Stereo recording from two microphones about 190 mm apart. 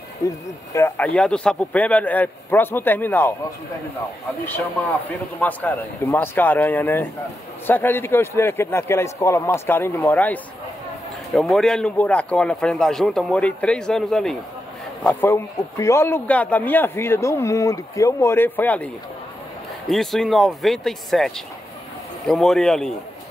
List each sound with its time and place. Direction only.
0.2 s a man's voice: 15° left (ahead or behind)
5.4 s a man's voice: 10° left (ahead or behind)
19.9 s speech: centre (ahead or behind)